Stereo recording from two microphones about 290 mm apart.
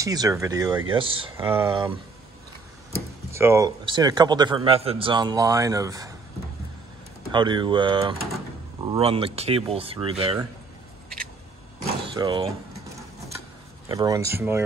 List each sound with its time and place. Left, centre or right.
0.0 s a man's voice: centre
3.3 s a man's voice: centre
7.3 s a man's voice: centre
11.8 s vehicle: centre
13.8 s a man's voice: centre